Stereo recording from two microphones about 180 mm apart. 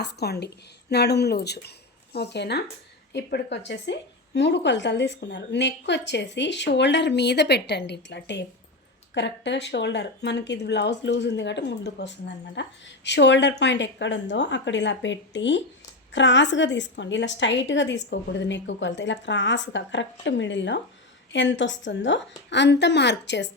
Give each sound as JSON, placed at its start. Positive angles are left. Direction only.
{"t": 0.0, "sound": "a woman's voice", "side_deg": 65}
{"t": 12.6, "sound": "a woman's voice", "side_deg": 90}
{"t": 13.1, "sound": "a woman's voice", "side_deg": 75}